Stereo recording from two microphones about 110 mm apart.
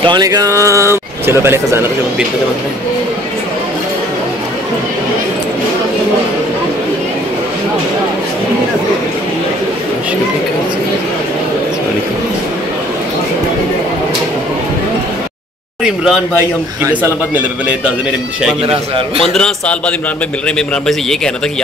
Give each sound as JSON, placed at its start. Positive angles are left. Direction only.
{"t": 0.0, "sound": "a man's voice", "side_deg": -40}
{"t": 15.8, "sound": "speech", "side_deg": -5}
{"t": 19.3, "sound": "a man's voice", "side_deg": 10}